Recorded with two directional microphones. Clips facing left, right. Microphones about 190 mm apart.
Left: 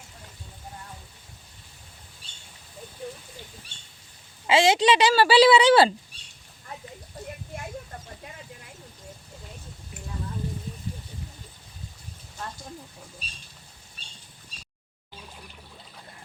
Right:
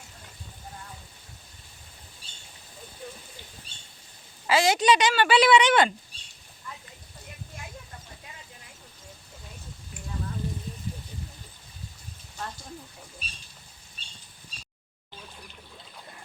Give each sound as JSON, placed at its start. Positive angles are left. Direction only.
{"t": 4.4, "sound": "a woman's voice", "side_deg": 25}